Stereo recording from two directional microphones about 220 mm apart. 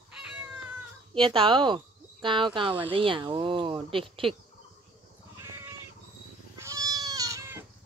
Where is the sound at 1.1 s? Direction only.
25° right (ahead or behind).